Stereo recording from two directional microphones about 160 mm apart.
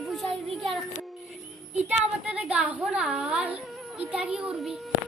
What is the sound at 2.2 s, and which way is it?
A woman's voice, 10° right (ahead or behind).